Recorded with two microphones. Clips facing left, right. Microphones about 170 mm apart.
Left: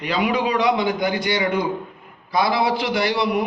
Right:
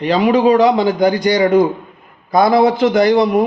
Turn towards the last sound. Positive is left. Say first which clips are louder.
# right 9 dB
turn(degrees=-45)  # may be behind; listen again after turning